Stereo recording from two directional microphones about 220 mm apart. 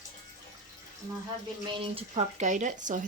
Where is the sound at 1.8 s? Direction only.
25° right (ahead or behind).